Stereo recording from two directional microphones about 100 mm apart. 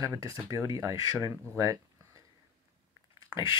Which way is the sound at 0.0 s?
35° right (ahead or behind).